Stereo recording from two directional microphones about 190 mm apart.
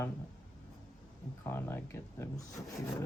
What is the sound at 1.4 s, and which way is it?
Speech, 15° left (ahead or behind).